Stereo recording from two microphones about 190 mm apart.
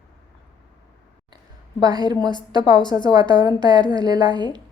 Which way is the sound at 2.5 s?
25° right (ahead or behind).